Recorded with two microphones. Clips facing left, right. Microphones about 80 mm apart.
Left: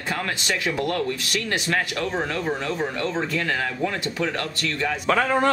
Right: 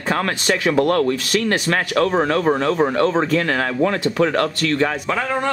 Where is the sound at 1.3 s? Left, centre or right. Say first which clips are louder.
Right 6 dB; right.